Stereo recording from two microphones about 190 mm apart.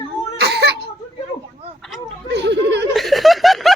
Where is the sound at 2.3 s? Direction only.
65° right (ahead or behind).